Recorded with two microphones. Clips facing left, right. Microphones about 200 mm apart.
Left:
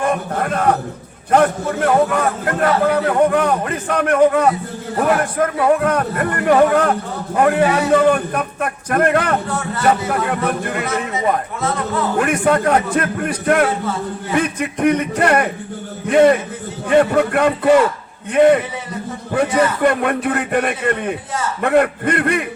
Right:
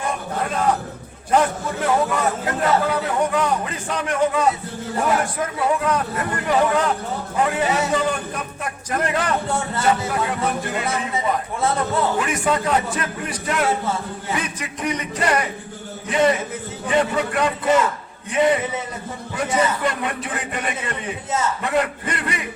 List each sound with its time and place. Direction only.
0.0 s a sound: 55° left (ahead or behind)
1.3 s a man's voice: 60° left (ahead or behind)
12.1 s speech: 60° left (ahead or behind)